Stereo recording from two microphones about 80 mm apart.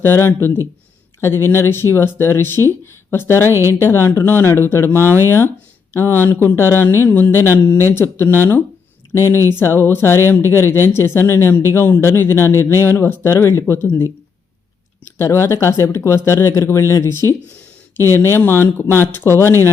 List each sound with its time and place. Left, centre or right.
0.0 s speech: left
3.5 s speech: right
3.8 s speech: left
15.0 s speech: left